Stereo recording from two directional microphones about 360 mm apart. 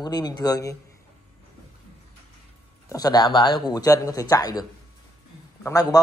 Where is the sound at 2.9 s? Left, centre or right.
Centre.